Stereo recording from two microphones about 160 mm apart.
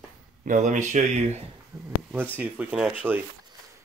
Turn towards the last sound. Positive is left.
turn(degrees=-10)  # may be behind; listen again after turning